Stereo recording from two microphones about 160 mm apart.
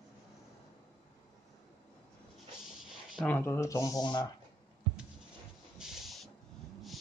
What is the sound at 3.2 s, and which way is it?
Speech, 10° left (ahead or behind).